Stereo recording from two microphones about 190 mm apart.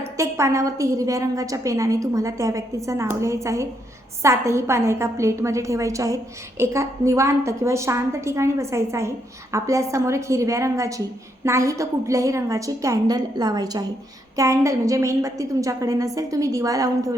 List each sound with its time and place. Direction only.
0.0 s a woman's voice: 15° right (ahead or behind)